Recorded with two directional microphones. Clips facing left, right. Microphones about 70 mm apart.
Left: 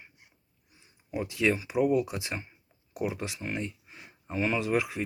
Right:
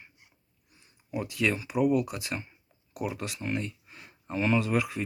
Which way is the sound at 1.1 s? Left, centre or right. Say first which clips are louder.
Left 1 dB; left.